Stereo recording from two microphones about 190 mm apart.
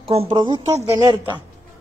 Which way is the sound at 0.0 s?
30° right (ahead or behind).